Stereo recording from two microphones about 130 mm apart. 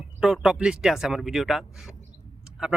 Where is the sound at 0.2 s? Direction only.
5° right (ahead or behind).